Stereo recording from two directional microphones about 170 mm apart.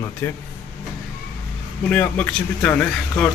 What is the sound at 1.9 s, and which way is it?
Mantra, 10° left (ahead or behind).